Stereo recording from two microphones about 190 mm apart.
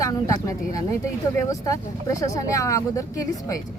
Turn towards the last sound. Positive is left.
turn(degrees=15)  # may be behind; listen again after turning